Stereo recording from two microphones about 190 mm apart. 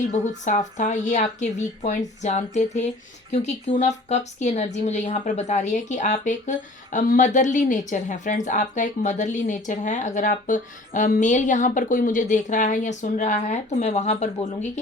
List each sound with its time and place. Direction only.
0.1 s speech: 40° left (ahead or behind)